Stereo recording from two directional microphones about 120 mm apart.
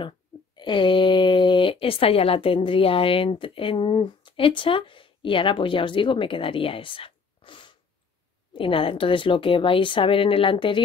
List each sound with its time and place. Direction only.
0.6 s speech: 40° left (ahead or behind)